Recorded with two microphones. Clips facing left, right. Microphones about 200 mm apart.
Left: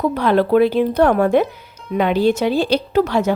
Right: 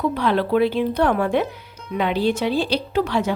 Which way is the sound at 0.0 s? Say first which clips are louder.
Left 4 dB; 45° left (ahead or behind).